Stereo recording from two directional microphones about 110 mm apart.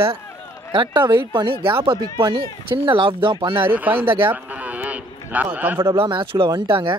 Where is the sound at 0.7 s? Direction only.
45° right (ahead or behind).